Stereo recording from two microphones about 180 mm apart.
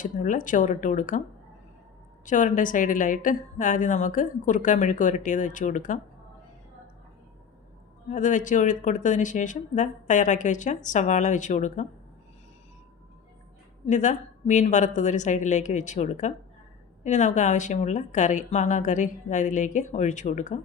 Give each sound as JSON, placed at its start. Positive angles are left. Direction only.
{"t": 0.0, "sound": "speech", "side_deg": 45}
{"t": 2.2, "sound": "speech", "side_deg": 45}
{"t": 8.1, "sound": "speech", "side_deg": 45}
{"t": 13.8, "sound": "speech", "side_deg": 45}